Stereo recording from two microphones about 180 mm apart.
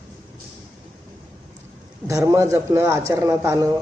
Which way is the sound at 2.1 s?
20° right (ahead or behind).